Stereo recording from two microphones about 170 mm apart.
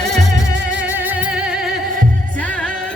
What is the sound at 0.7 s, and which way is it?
Music, 10° right (ahead or behind).